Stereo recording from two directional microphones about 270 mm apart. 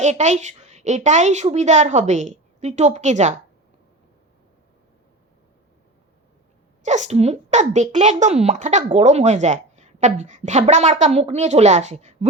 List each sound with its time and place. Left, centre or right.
0.0 s a child's voice: right
6.8 s a child's voice: right